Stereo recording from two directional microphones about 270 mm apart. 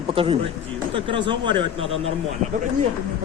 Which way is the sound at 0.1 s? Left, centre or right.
Centre.